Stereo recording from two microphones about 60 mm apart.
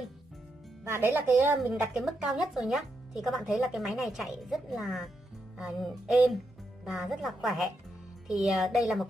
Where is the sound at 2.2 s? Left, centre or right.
Centre.